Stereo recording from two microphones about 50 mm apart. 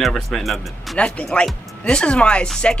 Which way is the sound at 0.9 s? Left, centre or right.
Left.